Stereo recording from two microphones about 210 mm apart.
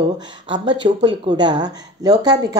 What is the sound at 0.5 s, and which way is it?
A woman's voice, 20° right (ahead or behind).